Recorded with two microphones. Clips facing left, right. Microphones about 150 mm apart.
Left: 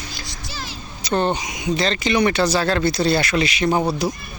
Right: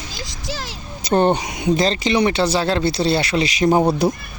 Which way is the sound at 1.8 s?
35° right (ahead or behind).